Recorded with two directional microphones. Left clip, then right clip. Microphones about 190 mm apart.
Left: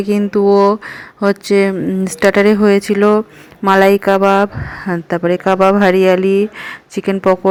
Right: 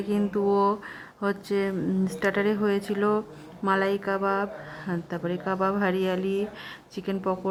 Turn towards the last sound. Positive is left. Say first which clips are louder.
# left 16 dB
turn(degrees=25)  # may be behind; listen again after turning